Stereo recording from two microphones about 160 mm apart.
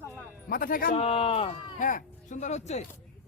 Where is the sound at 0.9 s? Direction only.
40° left (ahead or behind).